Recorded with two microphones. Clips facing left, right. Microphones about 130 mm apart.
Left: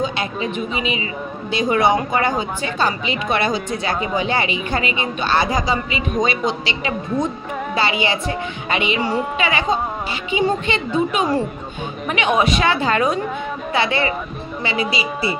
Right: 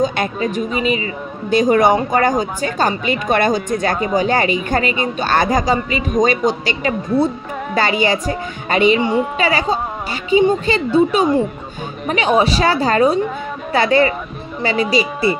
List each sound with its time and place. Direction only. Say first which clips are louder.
0.0 s a woman's voice: right 4 dB; 45° right (ahead or behind)